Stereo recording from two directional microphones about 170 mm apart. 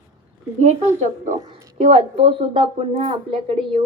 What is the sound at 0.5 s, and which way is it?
A woman's voice, 40° right (ahead or behind).